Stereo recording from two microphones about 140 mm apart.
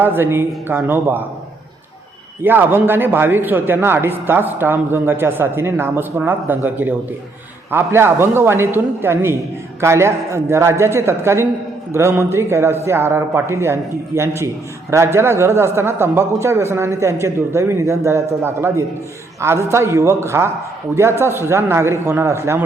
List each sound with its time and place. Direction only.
0.0 s speech: 15° right (ahead or behind)
2.4 s a man's voice: 15° right (ahead or behind)